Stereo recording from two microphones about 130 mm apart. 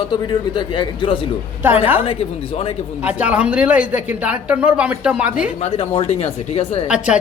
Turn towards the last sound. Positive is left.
turn(degrees=-5)  # may be behind; listen again after turning